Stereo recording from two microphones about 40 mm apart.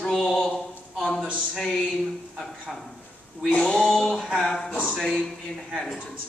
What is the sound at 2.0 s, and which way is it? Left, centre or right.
A man's voice, centre.